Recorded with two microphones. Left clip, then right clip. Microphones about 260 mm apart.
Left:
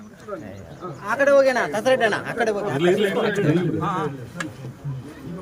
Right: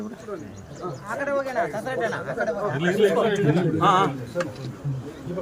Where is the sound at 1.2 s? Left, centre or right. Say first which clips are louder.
Left 9 dB; left.